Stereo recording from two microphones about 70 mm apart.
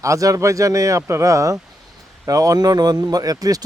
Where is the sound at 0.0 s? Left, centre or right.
Right.